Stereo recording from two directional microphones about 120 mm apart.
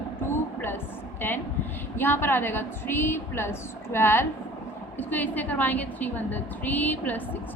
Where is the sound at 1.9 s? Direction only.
20° left (ahead or behind).